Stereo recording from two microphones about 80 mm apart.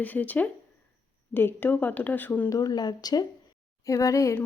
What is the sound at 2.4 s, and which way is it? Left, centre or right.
Speech, left.